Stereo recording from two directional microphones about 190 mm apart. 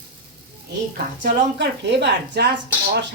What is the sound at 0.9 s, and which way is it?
Speech, 55° right (ahead or behind).